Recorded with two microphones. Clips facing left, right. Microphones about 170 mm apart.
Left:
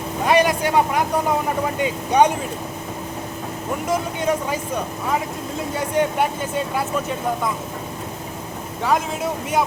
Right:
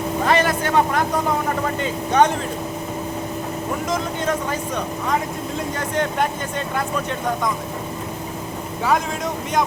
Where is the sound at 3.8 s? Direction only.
10° left (ahead or behind).